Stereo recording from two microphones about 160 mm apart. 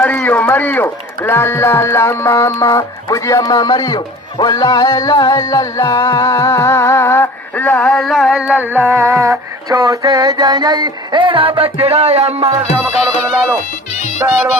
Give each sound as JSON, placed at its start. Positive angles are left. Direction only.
{"t": 0.0, "sound": "speech", "side_deg": 10}
{"t": 13.0, "sound": "music", "side_deg": -5}
{"t": 13.9, "sound": "music", "side_deg": 45}